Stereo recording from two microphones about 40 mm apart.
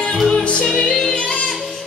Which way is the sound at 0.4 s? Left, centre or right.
Left.